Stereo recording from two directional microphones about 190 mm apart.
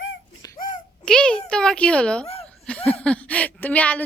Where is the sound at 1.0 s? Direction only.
5° left (ahead or behind).